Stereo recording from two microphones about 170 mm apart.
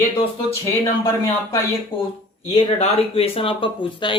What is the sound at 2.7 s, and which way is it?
Speech, 35° left (ahead or behind).